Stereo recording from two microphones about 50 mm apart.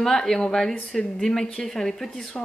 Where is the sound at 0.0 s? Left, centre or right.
Centre.